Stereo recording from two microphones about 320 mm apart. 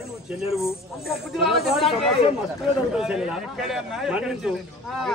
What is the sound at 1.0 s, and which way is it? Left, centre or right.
Speech, centre.